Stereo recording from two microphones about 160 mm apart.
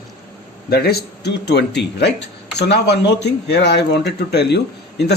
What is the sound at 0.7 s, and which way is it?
Speech, 80° left.